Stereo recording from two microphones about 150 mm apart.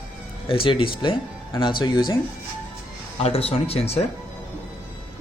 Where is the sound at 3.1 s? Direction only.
40° left (ahead or behind).